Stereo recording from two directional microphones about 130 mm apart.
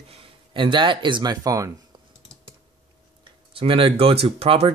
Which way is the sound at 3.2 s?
40° right (ahead or behind).